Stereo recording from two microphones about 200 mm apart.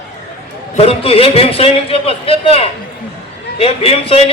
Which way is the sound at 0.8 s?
30° left (ahead or behind).